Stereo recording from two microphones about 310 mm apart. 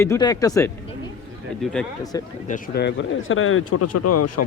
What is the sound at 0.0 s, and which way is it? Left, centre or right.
Speech, centre.